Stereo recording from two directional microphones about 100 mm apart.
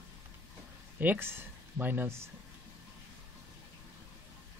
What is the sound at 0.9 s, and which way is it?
Speech, 20° right (ahead or behind).